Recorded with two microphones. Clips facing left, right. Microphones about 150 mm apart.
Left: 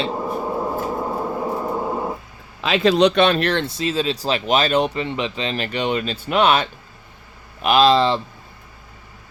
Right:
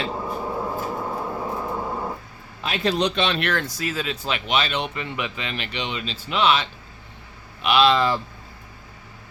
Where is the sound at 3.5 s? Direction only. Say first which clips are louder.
Left 4 dB; 25° left (ahead or behind).